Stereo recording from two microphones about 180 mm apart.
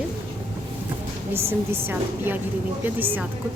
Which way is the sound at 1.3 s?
15° right (ahead or behind).